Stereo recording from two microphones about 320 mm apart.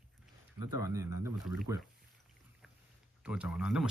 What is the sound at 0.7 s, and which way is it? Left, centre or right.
Speech, centre.